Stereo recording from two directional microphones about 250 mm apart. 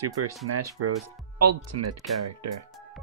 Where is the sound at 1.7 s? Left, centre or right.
Right.